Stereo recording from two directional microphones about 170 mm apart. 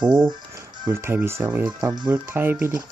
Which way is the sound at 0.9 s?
15° right (ahead or behind).